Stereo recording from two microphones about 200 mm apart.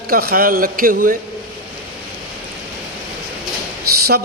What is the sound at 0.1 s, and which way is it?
A man's voice, 50° right (ahead or behind).